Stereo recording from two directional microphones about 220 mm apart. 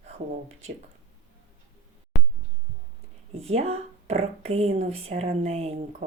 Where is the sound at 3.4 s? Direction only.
30° right (ahead or behind).